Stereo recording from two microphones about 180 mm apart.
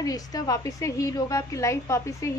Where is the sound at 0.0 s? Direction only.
20° left (ahead or behind).